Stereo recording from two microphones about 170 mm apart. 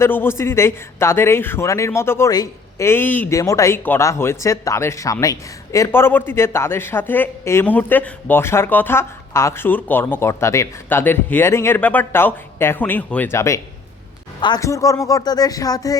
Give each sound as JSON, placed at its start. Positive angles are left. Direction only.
{"t": 0.0, "sound": "a man's voice", "side_deg": 15}